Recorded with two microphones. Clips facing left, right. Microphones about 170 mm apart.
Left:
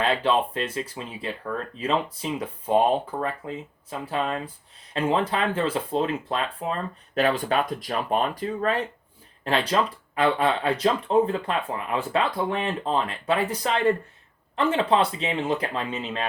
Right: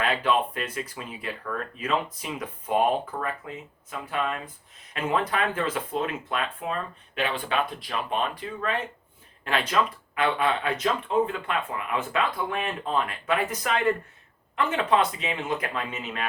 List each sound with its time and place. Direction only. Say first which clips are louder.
0.0 s speech: left 2 dB; 30° left (ahead or behind)